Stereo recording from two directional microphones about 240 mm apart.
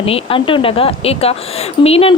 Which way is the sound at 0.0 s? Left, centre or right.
Left.